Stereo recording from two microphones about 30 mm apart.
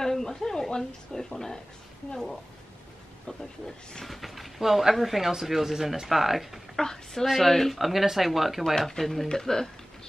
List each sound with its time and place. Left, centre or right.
0.0 s speech: centre
2.1 s speech: centre
3.3 s speech: left
4.0 s speech: centre
6.8 s speech: centre
7.2 s speech: centre
7.7 s speech: centre
8.8 s speech: centre
9.3 s speech: centre